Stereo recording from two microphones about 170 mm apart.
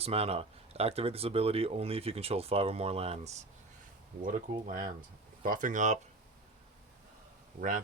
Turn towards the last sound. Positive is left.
turn(degrees=-55)  # may be behind; listen again after turning